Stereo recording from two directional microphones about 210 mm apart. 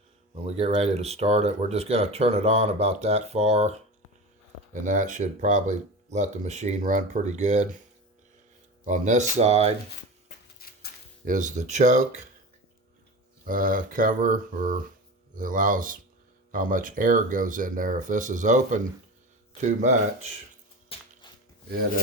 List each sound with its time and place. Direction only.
0.4 s speech: 30° right (ahead or behind)
8.8 s speech: 35° right (ahead or behind)
10.6 s a sound: 45° left (ahead or behind)
11.3 s speech: 35° right (ahead or behind)
13.4 s speech: 40° right (ahead or behind)
21.2 s a sound: 20° left (ahead or behind)